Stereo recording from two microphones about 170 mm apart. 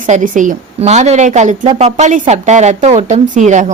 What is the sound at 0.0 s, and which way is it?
A woman's voice, 50° right (ahead or behind).